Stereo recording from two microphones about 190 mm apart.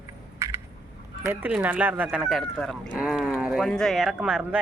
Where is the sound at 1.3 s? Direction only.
10° right (ahead or behind).